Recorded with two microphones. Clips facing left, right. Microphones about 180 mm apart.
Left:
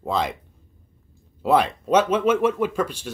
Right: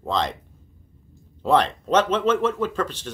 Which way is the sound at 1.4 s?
10° left (ahead or behind).